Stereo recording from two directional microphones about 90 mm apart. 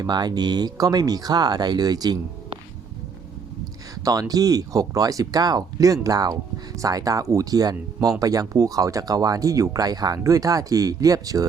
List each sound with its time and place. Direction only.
0.0 s speech: 50° right (ahead or behind)
4.0 s speech: 40° right (ahead or behind)